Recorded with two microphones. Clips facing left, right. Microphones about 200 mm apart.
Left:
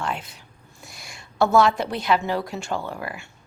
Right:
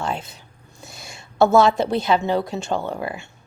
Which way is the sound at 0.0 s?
25° right (ahead or behind).